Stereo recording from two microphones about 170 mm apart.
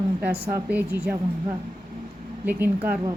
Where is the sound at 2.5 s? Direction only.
10° right (ahead or behind).